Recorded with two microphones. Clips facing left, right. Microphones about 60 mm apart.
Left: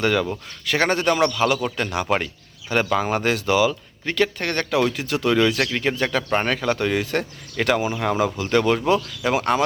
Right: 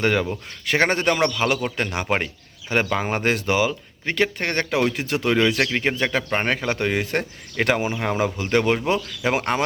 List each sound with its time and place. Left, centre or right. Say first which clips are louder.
0.0 s speech: even; right